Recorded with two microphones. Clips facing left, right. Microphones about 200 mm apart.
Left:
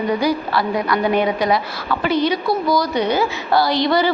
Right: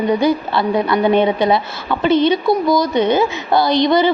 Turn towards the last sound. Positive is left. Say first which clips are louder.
# right 3 dB
turn(degrees=-20)  # may be behind; listen again after turning